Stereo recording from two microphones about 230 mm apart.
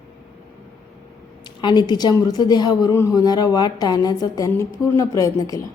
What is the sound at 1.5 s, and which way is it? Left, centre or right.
A woman's voice, centre.